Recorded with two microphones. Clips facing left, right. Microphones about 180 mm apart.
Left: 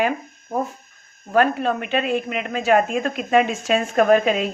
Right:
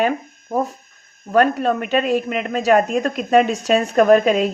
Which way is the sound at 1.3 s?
40° right (ahead or behind).